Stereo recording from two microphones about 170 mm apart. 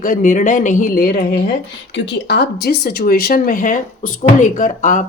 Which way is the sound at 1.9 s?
90° left.